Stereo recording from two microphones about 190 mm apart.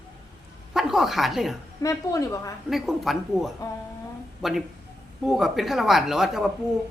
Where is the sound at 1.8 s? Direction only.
20° left (ahead or behind).